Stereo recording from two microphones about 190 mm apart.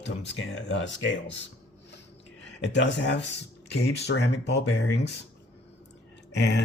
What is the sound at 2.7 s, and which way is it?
Speech, 70° left (ahead or behind).